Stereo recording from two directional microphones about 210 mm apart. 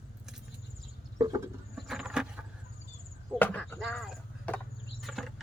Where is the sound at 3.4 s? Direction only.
10° left (ahead or behind).